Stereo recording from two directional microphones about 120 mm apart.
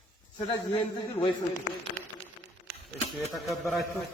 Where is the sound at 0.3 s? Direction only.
40° left (ahead or behind).